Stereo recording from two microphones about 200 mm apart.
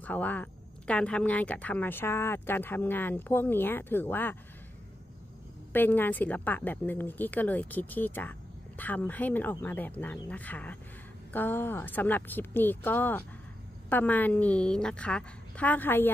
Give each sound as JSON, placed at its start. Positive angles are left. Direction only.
{"t": 0.0, "sound": "a woman's voice", "side_deg": 10}
{"t": 5.7, "sound": "a woman's voice", "side_deg": 10}